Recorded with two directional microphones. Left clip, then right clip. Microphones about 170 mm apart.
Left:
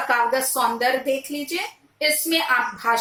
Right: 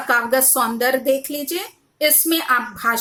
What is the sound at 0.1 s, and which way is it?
A woman's voice, 35° right (ahead or behind).